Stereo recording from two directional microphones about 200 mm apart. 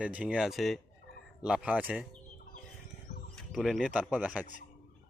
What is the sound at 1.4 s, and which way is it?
Stir, 5° right (ahead or behind).